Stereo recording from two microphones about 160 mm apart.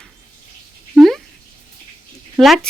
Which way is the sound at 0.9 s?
Centre (ahead or behind).